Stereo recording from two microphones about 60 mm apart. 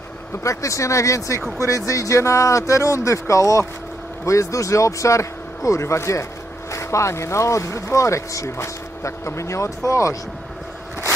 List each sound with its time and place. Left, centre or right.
0.4 s speech: left